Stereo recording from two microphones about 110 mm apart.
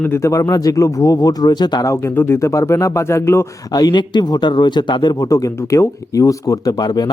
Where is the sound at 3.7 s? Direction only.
40° left (ahead or behind).